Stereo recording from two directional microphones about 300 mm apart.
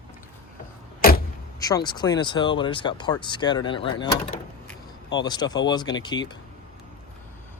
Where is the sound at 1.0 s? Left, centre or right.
Left.